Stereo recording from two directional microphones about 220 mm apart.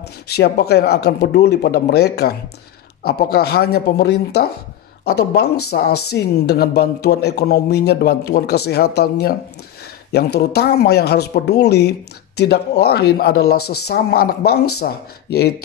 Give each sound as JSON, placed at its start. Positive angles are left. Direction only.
{"t": 0.3, "sound": "speech", "side_deg": 45}
{"t": 13.6, "sound": "speech", "side_deg": 90}
{"t": 13.8, "sound": "speech", "side_deg": 45}